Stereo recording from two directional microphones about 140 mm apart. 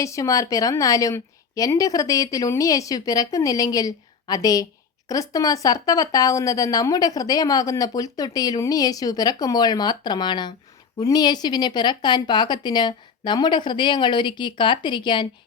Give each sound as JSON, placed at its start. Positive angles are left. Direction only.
{"t": 0.0, "sound": "a woman's voice", "side_deg": 20}